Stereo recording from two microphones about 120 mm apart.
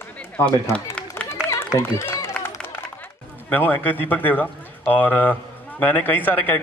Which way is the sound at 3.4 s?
15° left (ahead or behind).